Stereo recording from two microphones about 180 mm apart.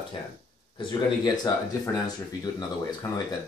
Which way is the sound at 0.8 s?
25° left (ahead or behind).